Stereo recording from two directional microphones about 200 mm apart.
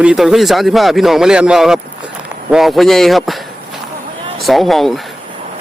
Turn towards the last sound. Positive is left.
turn(degrees=0)  # may be behind; listen again after turning